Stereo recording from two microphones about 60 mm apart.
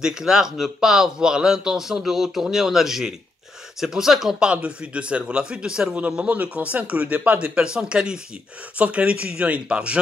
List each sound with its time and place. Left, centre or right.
0.0 s speech: centre
4.5 s speech: centre